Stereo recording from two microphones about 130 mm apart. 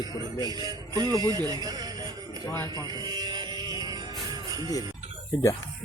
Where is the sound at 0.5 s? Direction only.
30° right (ahead or behind).